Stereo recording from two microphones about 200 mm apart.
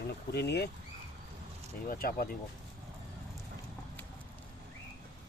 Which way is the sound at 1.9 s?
45° left (ahead or behind).